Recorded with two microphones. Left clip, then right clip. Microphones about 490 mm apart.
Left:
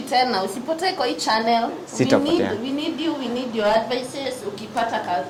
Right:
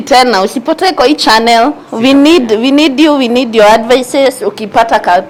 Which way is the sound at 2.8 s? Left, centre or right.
Right.